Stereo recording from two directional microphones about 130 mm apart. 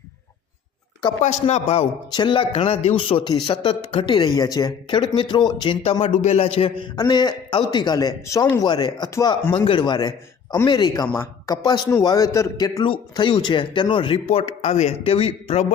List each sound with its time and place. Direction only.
1.2 s speech: 65° left (ahead or behind)
2.1 s speech: 40° left (ahead or behind)
5.8 s a man's voice: 50° left (ahead or behind)
6.9 s a man's voice: 30° left (ahead or behind); by 15.6 s 50° left (ahead or behind)